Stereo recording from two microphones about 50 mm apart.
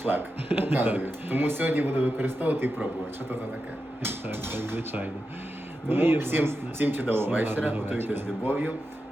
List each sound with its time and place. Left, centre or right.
0.0 s speech: right
4.0 s speech: right